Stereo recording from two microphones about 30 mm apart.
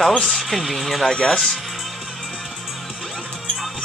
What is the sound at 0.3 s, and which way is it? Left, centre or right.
Speech, centre.